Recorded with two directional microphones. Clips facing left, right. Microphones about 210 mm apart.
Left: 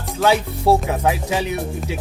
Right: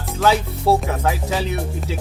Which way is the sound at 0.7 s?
20° left (ahead or behind).